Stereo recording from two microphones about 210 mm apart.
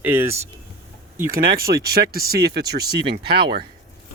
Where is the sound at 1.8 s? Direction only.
45° right (ahead or behind).